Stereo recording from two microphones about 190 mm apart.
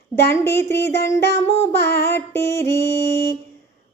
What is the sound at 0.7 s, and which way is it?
Child singing, 60° left (ahead or behind).